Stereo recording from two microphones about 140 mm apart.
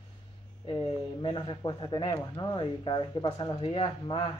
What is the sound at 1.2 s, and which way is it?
Speech, 35° left (ahead or behind).